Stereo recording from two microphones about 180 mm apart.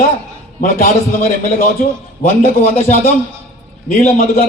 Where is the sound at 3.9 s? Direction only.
40° left (ahead or behind).